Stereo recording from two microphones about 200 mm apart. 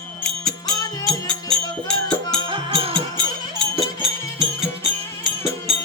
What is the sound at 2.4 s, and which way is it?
Music, 25° right (ahead or behind).